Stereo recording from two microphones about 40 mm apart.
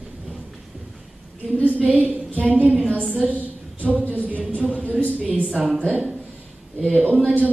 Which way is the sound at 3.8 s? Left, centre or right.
Right.